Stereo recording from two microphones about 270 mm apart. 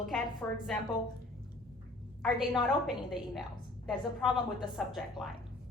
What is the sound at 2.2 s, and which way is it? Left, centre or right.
A woman's voice, centre.